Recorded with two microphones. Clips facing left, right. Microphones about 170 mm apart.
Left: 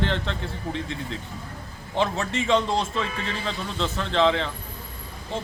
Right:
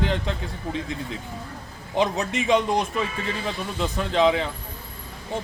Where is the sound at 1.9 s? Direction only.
15° right (ahead or behind).